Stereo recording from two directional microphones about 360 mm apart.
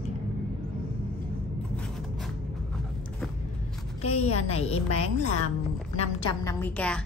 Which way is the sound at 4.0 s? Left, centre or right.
Centre.